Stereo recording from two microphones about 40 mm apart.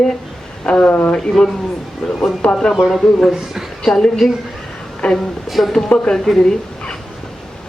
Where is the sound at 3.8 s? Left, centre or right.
Centre.